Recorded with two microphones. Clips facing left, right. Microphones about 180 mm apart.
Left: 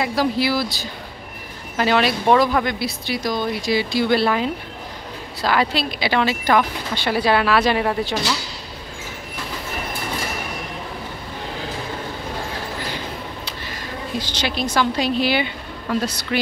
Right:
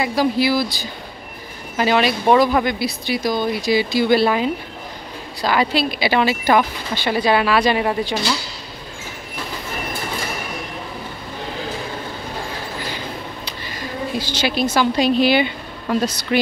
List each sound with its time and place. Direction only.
0.0 s speech: centre (ahead or behind)
14.1 s a woman's voice: 5° right (ahead or behind)